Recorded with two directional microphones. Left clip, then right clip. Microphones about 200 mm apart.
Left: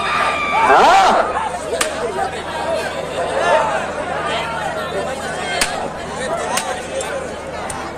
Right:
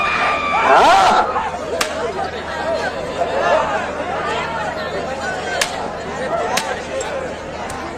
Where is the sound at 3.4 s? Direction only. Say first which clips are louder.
Left 1 dB; 30° left (ahead or behind).